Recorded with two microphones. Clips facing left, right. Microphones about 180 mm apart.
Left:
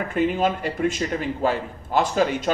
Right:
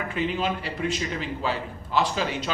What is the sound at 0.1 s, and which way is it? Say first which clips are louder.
A man's voice: left 6 dB; 50° left (ahead or behind).